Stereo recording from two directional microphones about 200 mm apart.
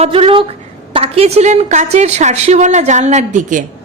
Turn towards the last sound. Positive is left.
turn(degrees=-40)  # may be behind; listen again after turning